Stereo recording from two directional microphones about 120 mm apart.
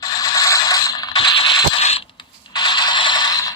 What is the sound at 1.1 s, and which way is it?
Mechanisms, 45° left (ahead or behind).